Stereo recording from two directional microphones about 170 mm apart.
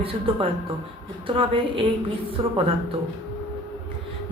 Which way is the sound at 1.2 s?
30° right (ahead or behind).